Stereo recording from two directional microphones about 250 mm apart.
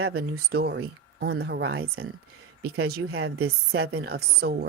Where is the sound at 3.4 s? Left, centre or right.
Right.